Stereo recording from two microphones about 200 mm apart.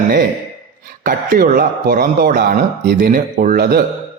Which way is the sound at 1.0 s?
45° right (ahead or behind).